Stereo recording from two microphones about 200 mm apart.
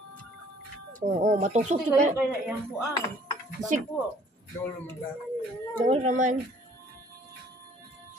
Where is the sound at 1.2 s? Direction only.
35° right (ahead or behind).